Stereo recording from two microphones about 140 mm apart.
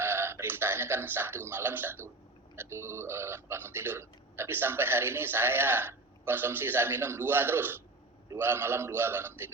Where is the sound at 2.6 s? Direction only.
20° right (ahead or behind).